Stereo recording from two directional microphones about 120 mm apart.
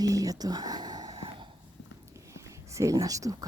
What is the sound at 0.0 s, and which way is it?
Whispering, 30° right (ahead or behind).